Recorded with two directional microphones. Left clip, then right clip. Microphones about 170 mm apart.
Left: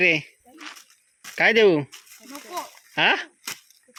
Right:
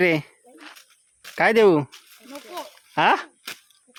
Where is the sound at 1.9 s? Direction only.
40° left (ahead or behind).